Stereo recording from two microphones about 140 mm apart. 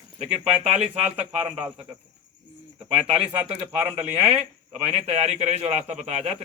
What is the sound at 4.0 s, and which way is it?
A man's voice, 45° right (ahead or behind).